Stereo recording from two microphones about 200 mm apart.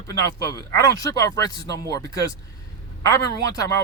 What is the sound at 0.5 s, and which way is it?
A man's voice, 20° left (ahead or behind).